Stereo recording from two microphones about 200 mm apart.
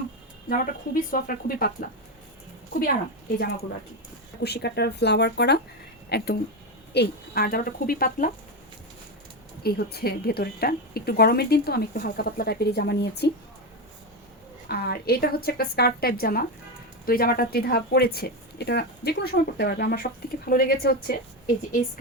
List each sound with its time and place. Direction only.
0.4 s speech: 45° left (ahead or behind)
3.3 s speech: 50° left (ahead or behind)
9.6 s speech: 50° left (ahead or behind)
14.7 s speech: 50° left (ahead or behind)